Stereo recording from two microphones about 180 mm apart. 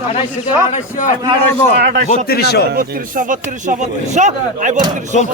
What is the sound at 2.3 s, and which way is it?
Speech, 60° left (ahead or behind).